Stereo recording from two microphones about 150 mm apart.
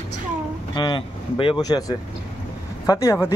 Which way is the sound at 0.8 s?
30° left (ahead or behind).